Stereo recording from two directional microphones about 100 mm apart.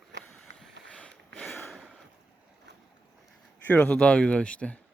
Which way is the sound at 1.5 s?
Centre (ahead or behind).